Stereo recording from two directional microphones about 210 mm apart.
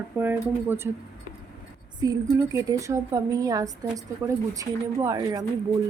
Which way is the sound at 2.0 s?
15° right (ahead or behind).